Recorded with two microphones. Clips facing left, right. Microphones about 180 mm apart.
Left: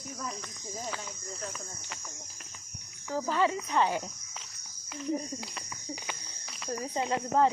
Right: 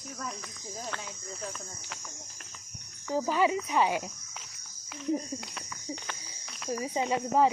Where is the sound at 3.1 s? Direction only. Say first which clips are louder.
Right 2 dB; 15° right (ahead or behind).